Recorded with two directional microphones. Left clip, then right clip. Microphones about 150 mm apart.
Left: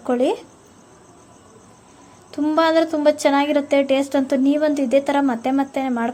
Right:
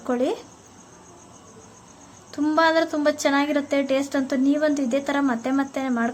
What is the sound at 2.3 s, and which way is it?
A woman's voice, 15° left (ahead or behind).